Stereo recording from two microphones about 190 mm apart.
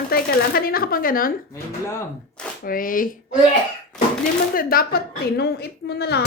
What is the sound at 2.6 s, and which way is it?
Speech, 45° left (ahead or behind).